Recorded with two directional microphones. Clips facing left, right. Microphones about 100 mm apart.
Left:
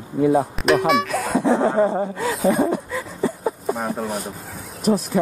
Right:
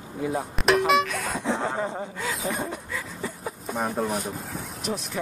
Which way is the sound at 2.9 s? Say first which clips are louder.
Left 9 dB; 35° left (ahead or behind).